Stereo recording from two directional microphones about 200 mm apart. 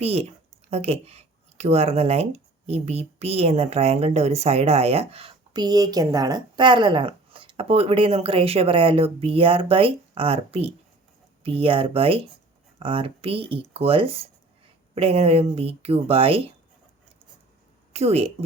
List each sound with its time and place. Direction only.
0.0 s speech: 30° right (ahead or behind)
17.9 s speech: 30° right (ahead or behind)